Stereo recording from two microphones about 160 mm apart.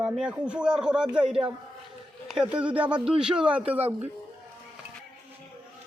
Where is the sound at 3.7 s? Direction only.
40° right (ahead or behind).